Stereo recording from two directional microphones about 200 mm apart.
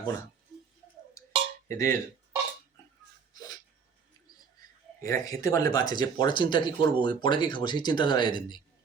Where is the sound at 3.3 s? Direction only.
20° left (ahead or behind).